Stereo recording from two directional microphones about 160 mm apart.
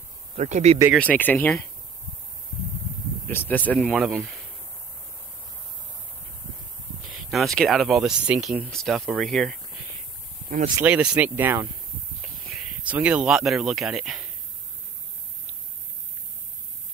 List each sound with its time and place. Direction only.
0.4 s speech: 45° right (ahead or behind)
0.9 s speech: 10° left (ahead or behind)
3.3 s speech: 10° left (ahead or behind)
3.9 s speech: centre (ahead or behind)
7.1 s speech: centre (ahead or behind)
10.8 s speech: 10° right (ahead or behind)